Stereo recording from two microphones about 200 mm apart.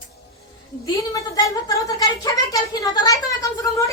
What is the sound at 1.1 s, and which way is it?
A woman's voice, 15° left (ahead or behind).